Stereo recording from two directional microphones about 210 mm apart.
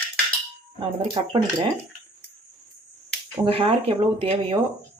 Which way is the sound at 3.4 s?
25° right (ahead or behind).